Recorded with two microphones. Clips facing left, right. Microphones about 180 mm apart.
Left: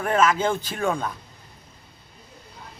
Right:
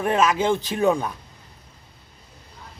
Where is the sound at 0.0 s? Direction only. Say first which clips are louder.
Right 1 dB; 20° right (ahead or behind).